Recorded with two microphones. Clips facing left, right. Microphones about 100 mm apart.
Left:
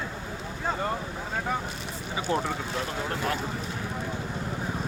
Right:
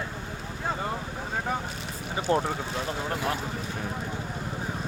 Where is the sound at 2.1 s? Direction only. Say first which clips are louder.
Right 2 dB; 35° right (ahead or behind).